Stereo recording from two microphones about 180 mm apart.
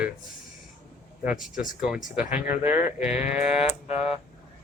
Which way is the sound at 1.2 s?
5° right (ahead or behind).